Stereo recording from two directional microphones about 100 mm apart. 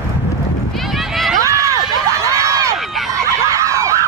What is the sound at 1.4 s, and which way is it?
Run, 30° right (ahead or behind).